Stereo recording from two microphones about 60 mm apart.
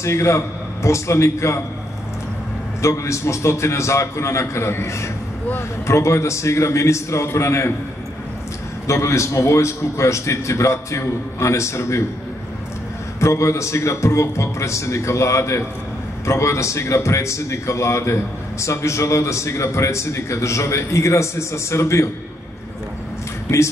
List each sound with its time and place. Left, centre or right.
0.0 s a man's voice: left
2.8 s a man's voice: left
8.8 s a man's voice: left
13.2 s a man's voice: left